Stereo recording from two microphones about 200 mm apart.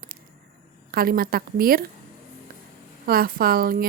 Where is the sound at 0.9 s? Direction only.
50° right (ahead or behind).